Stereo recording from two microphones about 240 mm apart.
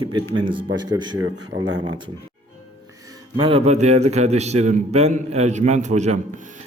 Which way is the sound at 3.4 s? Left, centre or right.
Right.